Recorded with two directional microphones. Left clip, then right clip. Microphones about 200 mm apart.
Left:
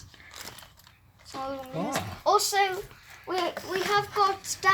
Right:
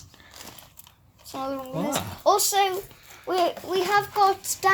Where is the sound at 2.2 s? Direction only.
60° right (ahead or behind).